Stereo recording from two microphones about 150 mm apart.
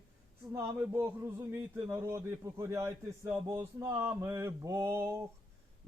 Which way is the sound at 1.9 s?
20° right (ahead or behind).